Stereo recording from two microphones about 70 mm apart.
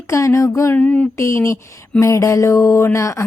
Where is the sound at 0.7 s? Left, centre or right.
Left.